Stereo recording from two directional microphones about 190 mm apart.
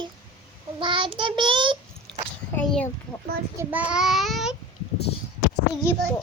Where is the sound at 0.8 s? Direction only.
25° right (ahead or behind).